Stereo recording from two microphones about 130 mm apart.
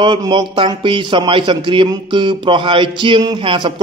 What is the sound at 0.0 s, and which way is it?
A man's voice, 35° right (ahead or behind).